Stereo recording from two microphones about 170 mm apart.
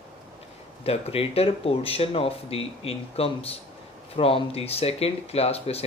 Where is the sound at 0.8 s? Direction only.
35° left (ahead or behind).